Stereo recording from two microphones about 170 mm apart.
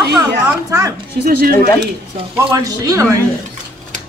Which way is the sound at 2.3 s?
20° right (ahead or behind).